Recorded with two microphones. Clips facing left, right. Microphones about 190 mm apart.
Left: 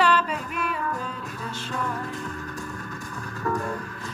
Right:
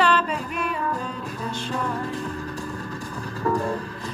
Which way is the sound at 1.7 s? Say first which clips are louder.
Right 2 dB; 30° right (ahead or behind).